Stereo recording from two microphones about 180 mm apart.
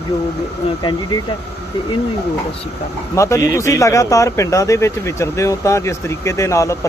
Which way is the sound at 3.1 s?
15° left (ahead or behind).